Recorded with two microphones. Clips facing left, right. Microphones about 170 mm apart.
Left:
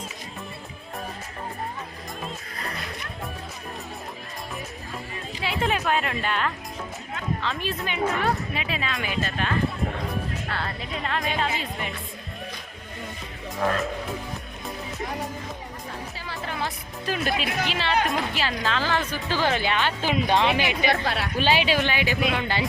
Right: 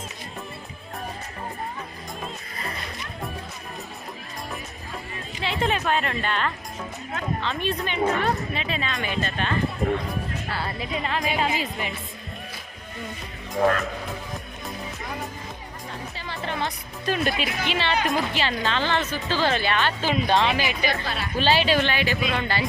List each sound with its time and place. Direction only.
2.2 s music: centre (ahead or behind)
5.4 s a woman's voice: 5° left (ahead or behind)
16.1 s music: 5° left (ahead or behind)
18.0 s speech: centre (ahead or behind)
21.0 s speech: 70° left (ahead or behind)
21.3 s speech: 10° left (ahead or behind)